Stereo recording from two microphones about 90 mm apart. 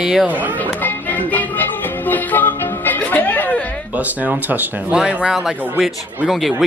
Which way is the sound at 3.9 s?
15° right (ahead or behind).